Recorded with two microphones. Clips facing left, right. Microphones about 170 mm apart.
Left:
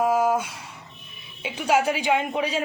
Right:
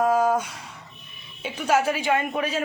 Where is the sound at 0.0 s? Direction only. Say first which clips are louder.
Right 1 dB; 5° left (ahead or behind).